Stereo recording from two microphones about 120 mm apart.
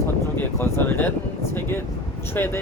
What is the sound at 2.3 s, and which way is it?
Speech, 15° left (ahead or behind).